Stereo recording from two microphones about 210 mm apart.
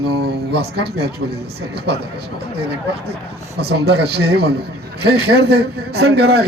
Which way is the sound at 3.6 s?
50° right (ahead or behind).